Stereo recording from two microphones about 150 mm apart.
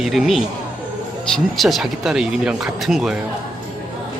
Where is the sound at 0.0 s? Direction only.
Centre (ahead or behind).